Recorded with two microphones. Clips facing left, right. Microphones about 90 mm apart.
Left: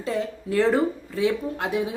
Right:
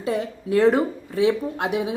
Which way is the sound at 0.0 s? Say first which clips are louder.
Right 2 dB; 15° right (ahead or behind).